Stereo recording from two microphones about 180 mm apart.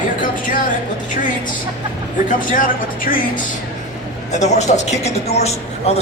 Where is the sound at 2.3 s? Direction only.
50° left (ahead or behind).